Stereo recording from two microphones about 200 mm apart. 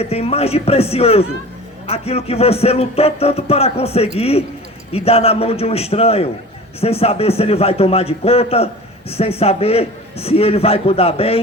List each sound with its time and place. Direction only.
0.0 s a man's voice: 30° left (ahead or behind)